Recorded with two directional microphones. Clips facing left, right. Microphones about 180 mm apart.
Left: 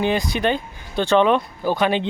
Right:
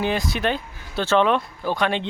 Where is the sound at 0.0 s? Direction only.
Centre (ahead or behind).